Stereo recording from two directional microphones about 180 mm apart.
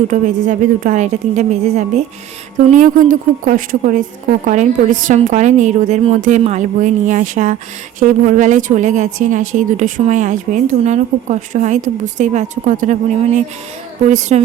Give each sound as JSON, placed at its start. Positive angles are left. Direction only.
{"t": 0.1, "sound": "a woman's voice", "side_deg": -45}